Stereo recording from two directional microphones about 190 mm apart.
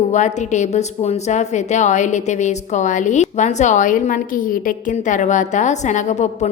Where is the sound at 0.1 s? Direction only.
40° left (ahead or behind).